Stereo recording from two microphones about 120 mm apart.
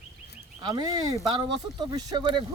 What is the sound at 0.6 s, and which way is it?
Speech, 35° right (ahead or behind).